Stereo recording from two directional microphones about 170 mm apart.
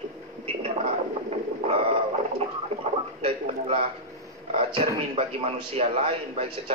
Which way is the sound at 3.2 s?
35° right (ahead or behind).